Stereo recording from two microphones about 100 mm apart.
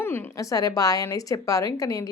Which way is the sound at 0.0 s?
20° left (ahead or behind).